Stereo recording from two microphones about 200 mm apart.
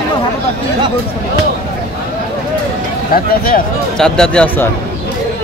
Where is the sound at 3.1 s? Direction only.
45° left (ahead or behind).